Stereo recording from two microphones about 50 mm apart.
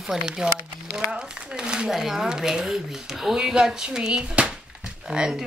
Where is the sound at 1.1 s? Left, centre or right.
Centre.